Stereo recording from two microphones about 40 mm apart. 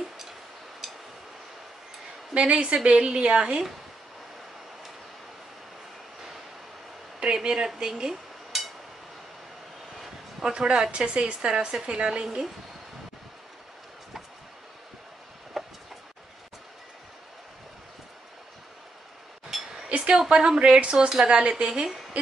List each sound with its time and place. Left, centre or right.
2.3 s a woman's voice: right
7.2 s dishes: centre
10.5 s a woman's voice: centre
15.6 s a sound: centre
19.5 s chink: centre
20.2 s a woman's voice: right